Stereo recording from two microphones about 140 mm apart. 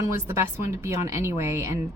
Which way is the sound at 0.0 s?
20° right (ahead or behind).